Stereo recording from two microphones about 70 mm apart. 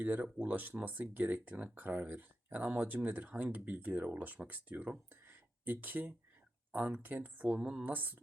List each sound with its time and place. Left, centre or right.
0.0 s speech: right
5.2 s a sound: right
6.7 s speech: right
7.6 s speech: centre
7.9 s speech: right